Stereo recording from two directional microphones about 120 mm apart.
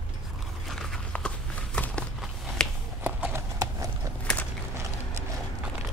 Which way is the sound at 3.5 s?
30° right (ahead or behind).